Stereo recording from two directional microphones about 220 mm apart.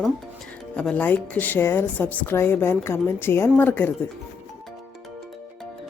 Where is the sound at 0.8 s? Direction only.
5° left (ahead or behind).